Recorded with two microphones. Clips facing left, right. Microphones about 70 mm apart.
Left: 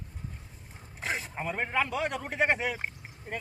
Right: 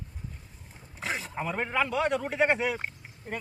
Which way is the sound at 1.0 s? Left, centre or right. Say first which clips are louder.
Right 1 dB; centre.